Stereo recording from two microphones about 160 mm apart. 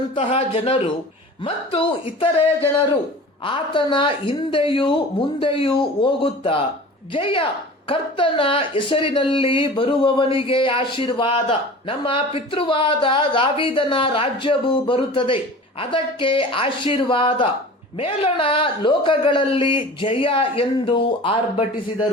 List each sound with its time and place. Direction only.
0.1 s speech: 35° left (ahead or behind)